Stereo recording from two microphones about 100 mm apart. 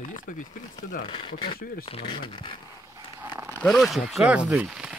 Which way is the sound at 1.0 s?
60° left (ahead or behind).